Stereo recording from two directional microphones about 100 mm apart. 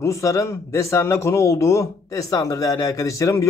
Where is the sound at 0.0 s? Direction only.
30° left (ahead or behind).